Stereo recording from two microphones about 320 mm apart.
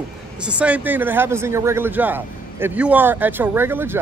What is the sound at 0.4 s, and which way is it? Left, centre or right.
A man's voice, centre.